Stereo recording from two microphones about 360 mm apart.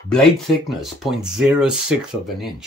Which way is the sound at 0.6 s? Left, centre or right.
Centre.